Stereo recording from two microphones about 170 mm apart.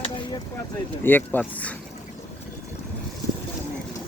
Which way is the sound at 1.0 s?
10° left (ahead or behind).